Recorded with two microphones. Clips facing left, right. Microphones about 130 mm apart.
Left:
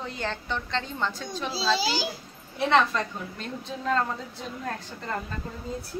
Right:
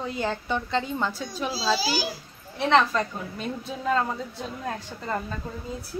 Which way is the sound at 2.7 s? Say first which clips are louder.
Right 2 dB; centre (ahead or behind).